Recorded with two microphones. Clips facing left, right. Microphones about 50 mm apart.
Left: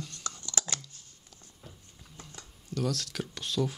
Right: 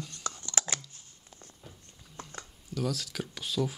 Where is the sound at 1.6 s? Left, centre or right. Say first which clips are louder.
Left 1 dB; centre.